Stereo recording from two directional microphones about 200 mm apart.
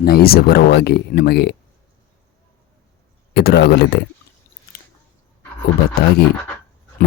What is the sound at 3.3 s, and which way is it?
Speech, 55° left (ahead or behind).